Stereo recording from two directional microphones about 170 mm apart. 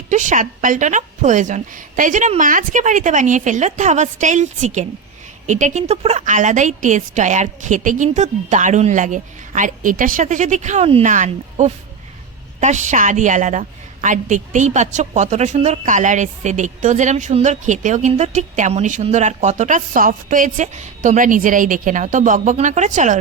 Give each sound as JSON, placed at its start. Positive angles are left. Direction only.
{"t": 0.1, "sound": "a woman's voice", "side_deg": -45}